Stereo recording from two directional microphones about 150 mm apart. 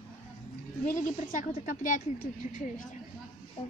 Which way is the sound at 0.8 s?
60° left (ahead or behind).